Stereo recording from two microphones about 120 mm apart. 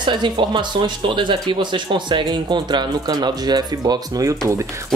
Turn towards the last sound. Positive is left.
turn(degrees=-25)  # may be behind; listen again after turning